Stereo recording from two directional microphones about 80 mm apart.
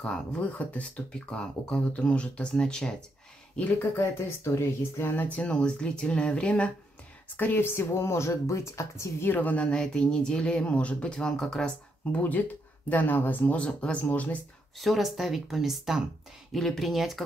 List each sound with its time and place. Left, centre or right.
0.0 s speech: centre
3.5 s speech: left
7.3 s speech: left; by 12.2 s centre
12.2 s speech: left
14.8 s speech: centre